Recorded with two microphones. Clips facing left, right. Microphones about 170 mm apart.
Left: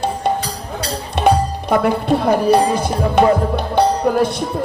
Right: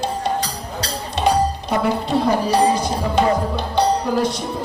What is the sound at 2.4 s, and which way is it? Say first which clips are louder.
Speech: left 3 dB; 55° left (ahead or behind).